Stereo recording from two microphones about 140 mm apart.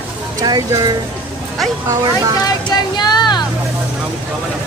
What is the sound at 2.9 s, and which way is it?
Speech, 30° left (ahead or behind).